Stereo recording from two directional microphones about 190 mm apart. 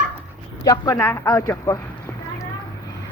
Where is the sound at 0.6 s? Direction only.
20° left (ahead or behind).